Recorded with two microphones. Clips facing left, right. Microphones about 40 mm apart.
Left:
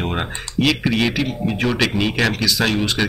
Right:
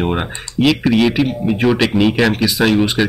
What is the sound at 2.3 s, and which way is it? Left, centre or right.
Speech, right.